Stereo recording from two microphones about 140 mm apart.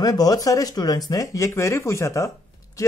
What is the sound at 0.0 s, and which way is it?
Speech, 25° left (ahead or behind).